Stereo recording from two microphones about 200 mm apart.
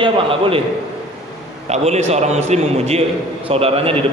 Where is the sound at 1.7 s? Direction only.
35° right (ahead or behind).